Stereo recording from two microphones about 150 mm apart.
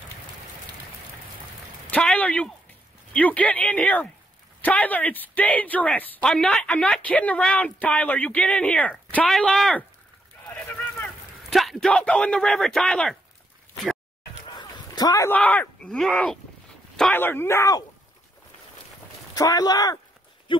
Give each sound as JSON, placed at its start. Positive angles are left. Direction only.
{"t": 1.9, "sound": "speech", "side_deg": 10}
{"t": 11.5, "sound": "speech", "side_deg": 0}
{"t": 14.6, "sound": "speech", "side_deg": 25}
{"t": 19.3, "sound": "speech", "side_deg": 25}